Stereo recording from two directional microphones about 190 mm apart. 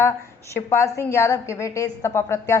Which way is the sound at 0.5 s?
15° left (ahead or behind).